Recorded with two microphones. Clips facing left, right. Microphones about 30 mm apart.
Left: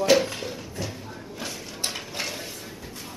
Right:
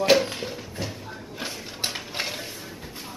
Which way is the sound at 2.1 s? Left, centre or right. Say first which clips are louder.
Right 1 dB; right.